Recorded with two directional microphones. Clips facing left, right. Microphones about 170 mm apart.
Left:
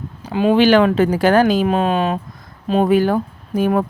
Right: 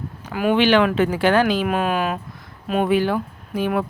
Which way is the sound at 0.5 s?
40° left (ahead or behind).